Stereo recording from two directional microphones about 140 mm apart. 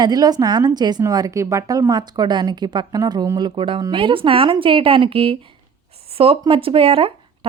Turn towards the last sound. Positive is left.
turn(degrees=-40)  # may be behind; listen again after turning